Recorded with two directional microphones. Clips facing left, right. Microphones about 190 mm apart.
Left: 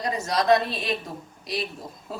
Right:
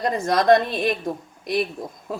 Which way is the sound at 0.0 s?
50° right (ahead or behind).